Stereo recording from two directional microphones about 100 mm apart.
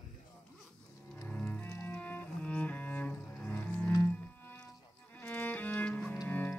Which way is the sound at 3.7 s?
15° left (ahead or behind).